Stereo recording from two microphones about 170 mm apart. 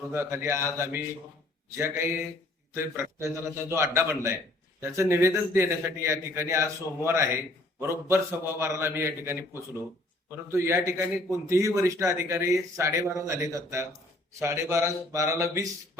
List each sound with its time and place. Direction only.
0.1 s a man's voice: 15° right (ahead or behind)